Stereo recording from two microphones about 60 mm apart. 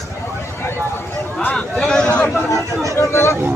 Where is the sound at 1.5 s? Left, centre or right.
Centre.